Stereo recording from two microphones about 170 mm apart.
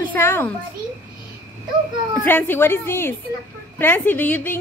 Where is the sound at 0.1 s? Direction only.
10° left (ahead or behind).